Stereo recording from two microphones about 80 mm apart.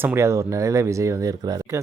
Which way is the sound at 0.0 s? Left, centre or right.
Right.